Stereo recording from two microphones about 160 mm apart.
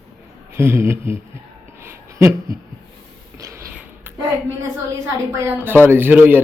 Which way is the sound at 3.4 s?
20° right (ahead or behind).